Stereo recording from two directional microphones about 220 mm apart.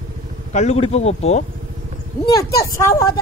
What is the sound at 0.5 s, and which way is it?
Speech, 30° left (ahead or behind).